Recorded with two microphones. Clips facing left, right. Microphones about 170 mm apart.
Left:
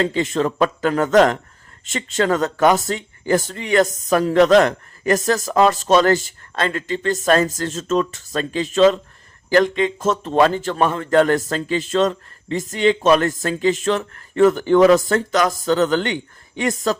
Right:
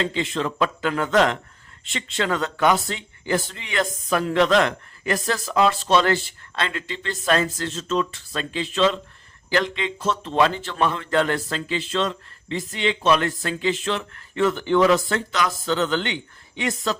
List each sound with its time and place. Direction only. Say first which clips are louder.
0.0 s a man's voice: left 5 dB; 45° left (ahead or behind)